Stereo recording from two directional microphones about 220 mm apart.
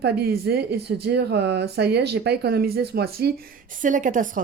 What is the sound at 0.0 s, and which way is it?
Speech, 45° right (ahead or behind).